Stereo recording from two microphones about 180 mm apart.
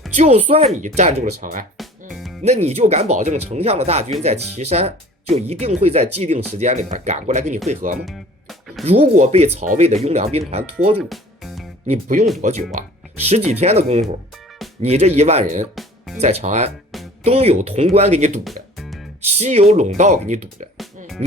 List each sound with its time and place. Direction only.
0.2 s speech: 35° right (ahead or behind)
8.0 s music: centre (ahead or behind)
8.8 s speech: 40° right (ahead or behind)
11.1 s music: centre (ahead or behind)
11.9 s speech: 40° right (ahead or behind)
15.7 s music: centre (ahead or behind)
16.2 s speech: 40° right (ahead or behind)
18.4 s music: centre (ahead or behind)
19.4 s speech: 35° right (ahead or behind)